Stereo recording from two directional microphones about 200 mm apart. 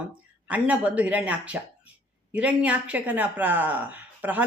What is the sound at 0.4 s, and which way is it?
A woman's voice, 5° right (ahead or behind).